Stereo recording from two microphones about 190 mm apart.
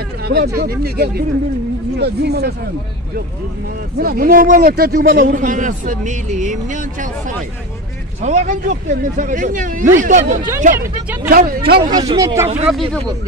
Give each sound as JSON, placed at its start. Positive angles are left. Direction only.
{"t": 0.2, "sound": "a sound", "side_deg": -60}
{"t": 0.6, "sound": "speech", "side_deg": -55}
{"t": 4.0, "sound": "speech", "side_deg": -50}
{"t": 11.9, "sound": "speech", "side_deg": -20}